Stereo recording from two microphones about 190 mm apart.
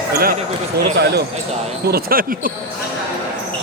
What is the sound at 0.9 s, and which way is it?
Speech, 60° right (ahead or behind).